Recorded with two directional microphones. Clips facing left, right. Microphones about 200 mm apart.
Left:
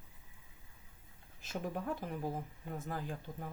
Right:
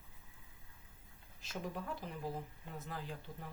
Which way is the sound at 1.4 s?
50° left (ahead or behind).